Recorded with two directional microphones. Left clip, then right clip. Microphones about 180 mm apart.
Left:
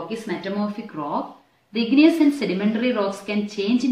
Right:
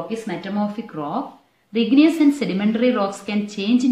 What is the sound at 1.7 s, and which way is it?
A woman's voice, 50° right (ahead or behind).